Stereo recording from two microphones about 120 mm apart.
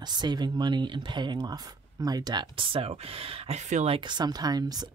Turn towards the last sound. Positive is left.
turn(degrees=-35)  # may be behind; listen again after turning